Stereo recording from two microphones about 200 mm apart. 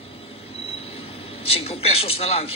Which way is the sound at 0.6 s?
30° left (ahead or behind).